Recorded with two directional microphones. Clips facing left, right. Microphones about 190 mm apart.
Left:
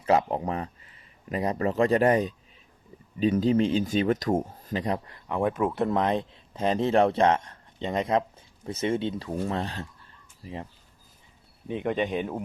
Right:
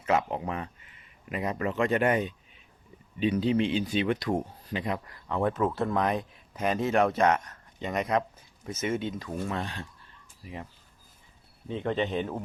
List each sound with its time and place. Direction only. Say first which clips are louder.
0.0 s speech: left 4 dB; 35° left (ahead or behind)
5.0 s speech: left 1 dB; 20° left (ahead or behind)
11.7 s a man's voice: left 2 dB; 15° left (ahead or behind)